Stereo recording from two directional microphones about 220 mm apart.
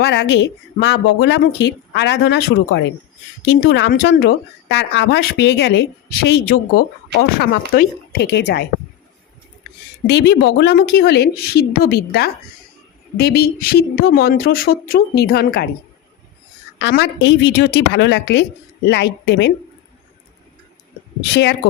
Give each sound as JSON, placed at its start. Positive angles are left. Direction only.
{"t": 0.0, "sound": "speech", "side_deg": 50}
{"t": 10.1, "sound": "speech", "side_deg": 50}
{"t": 16.7, "sound": "speech", "side_deg": 55}